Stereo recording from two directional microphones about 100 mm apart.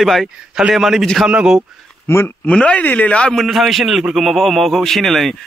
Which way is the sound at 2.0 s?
25° left (ahead or behind).